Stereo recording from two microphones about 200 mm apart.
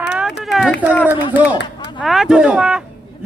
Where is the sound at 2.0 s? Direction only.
Centre (ahead or behind).